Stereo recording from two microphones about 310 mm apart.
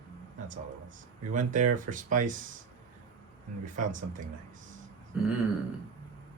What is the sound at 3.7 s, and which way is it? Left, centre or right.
Speech, right.